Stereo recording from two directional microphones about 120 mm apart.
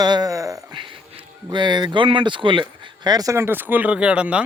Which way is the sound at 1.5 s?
40° right (ahead or behind).